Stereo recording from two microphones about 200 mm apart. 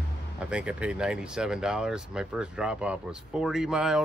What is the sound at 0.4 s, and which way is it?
Speech, 5° right (ahead or behind).